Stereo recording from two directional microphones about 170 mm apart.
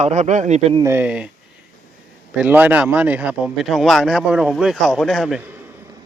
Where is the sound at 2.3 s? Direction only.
5° right (ahead or behind).